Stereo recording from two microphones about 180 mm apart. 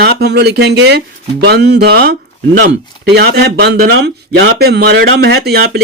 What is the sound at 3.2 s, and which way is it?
Speech, 65° right (ahead or behind).